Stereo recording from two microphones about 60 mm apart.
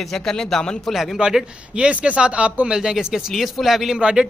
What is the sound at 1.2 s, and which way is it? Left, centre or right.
A man's voice, centre.